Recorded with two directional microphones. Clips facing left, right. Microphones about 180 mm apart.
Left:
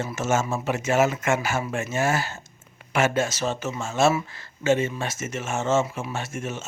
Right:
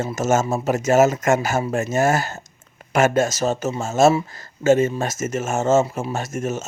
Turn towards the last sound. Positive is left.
turn(degrees=-40)  # may be behind; listen again after turning